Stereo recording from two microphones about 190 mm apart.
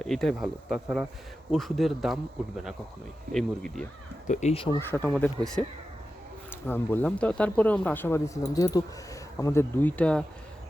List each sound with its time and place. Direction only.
0.0 s speech: centre (ahead or behind)
4.3 s speech: 35° left (ahead or behind)
4.8 s speech: 10° left (ahead or behind)